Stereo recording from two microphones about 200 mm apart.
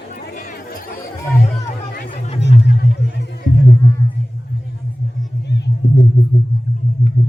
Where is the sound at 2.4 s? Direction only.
60° left (ahead or behind).